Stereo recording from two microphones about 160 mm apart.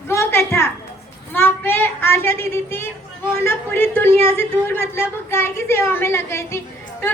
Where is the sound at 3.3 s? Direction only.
15° left (ahead or behind).